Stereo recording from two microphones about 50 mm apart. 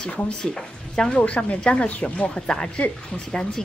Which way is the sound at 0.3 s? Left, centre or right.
Centre.